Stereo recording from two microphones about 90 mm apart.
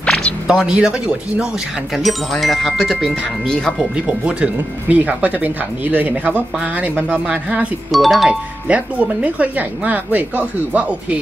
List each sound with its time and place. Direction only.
0.5 s speech: 10° right (ahead or behind)
2.0 s speech: centre (ahead or behind)
3.9 s speech: 15° right (ahead or behind)
7.9 s speech: centre (ahead or behind)
8.3 s speech: 15° right (ahead or behind)